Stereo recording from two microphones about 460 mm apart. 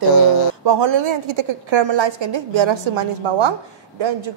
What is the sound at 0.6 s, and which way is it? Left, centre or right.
A woman's voice, right.